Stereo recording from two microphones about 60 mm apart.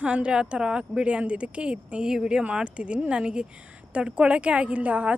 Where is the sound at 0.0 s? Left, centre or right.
Centre.